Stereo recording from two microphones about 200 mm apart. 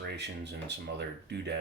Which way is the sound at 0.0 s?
55° right (ahead or behind).